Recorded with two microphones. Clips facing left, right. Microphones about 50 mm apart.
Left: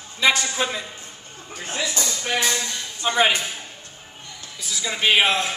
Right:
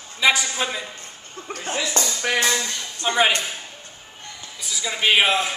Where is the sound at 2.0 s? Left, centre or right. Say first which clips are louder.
Right 3 dB; right.